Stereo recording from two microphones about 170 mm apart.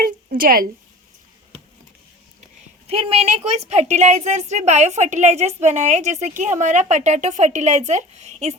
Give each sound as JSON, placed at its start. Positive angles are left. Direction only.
{"t": 0.0, "sound": "a woman's voice", "side_deg": -55}
{"t": 2.8, "sound": "a woman's voice", "side_deg": -35}